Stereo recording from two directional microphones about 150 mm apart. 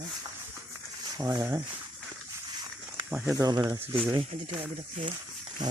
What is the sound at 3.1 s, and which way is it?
Speech, 5° right (ahead or behind).